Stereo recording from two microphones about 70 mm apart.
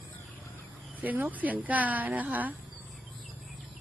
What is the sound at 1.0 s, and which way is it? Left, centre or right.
Speech, right.